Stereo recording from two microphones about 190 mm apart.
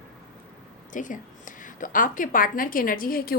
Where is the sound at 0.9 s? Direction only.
45° left (ahead or behind).